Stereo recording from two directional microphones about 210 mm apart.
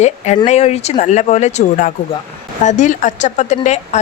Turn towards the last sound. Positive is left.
turn(degrees=35)  # may be behind; listen again after turning